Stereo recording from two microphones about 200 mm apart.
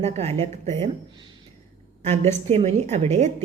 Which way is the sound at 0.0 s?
30° right (ahead or behind).